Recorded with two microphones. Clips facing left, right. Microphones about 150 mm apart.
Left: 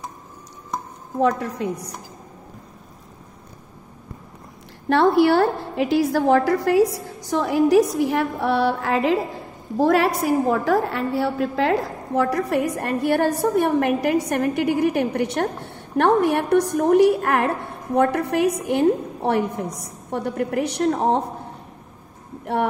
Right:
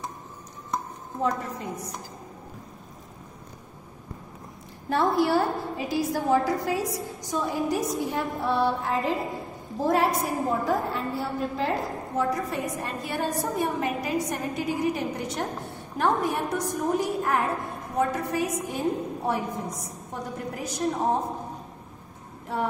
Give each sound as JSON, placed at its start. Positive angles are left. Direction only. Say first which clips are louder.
{"t": 1.2, "sound": "a woman's voice", "louder": "left 7 dB", "side_deg": 75}
{"t": 4.8, "sound": "a woman's voice", "louder": "left 7 dB", "side_deg": 70}
{"t": 22.5, "sound": "a woman's voice", "louder": "left 7 dB", "side_deg": 70}